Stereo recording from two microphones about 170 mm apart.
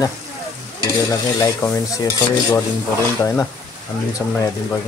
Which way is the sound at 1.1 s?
15° left (ahead or behind).